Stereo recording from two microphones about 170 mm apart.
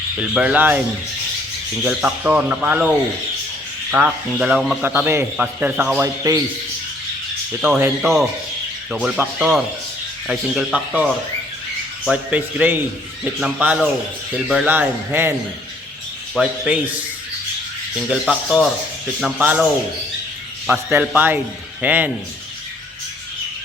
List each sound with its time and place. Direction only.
0.2 s a man's voice: 5° right (ahead or behind)
1.8 s a man's voice: 10° right (ahead or behind)
3.9 s a man's voice: 5° right (ahead or behind)
6.0 s speech: 20° right (ahead or behind)
8.0 s a man's voice: centre (ahead or behind)
16.3 s a man's voice: 5° right (ahead or behind)
17.9 s a man's voice: 5° right (ahead or behind)
20.7 s a man's voice: 5° right (ahead or behind)